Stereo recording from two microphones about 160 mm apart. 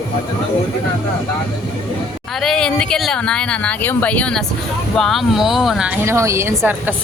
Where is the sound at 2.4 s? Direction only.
5° left (ahead or behind).